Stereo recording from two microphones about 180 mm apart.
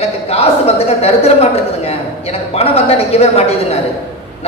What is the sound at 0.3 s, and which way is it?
A man's voice, 35° left (ahead or behind).